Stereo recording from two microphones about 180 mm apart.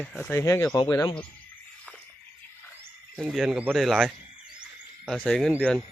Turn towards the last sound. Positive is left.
turn(degrees=0)  # may be behind; listen again after turning